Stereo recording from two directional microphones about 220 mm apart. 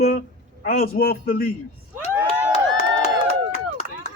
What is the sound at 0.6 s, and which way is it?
Speech, 40° left (ahead or behind).